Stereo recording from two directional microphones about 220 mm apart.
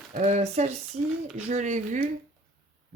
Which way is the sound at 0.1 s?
30° right (ahead or behind).